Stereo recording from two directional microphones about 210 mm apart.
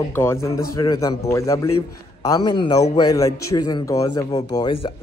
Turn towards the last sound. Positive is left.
turn(degrees=20)  # may be behind; listen again after turning